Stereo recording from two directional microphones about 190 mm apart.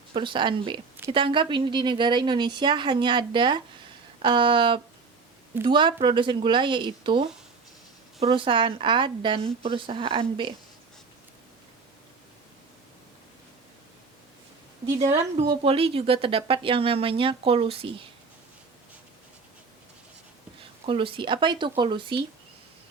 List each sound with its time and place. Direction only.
0.1 s speech: 25° right (ahead or behind)
14.8 s a woman's voice: 15° right (ahead or behind)
15.4 s speech: 30° right (ahead or behind)
20.8 s speech: 30° right (ahead or behind)